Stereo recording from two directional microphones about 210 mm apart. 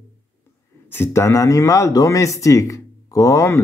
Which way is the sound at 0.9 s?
10° left (ahead or behind).